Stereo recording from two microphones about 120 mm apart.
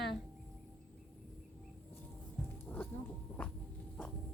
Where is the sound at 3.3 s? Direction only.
15° left (ahead or behind).